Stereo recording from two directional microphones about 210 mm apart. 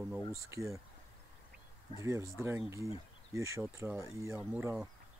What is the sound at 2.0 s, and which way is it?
Speech, 15° right (ahead or behind).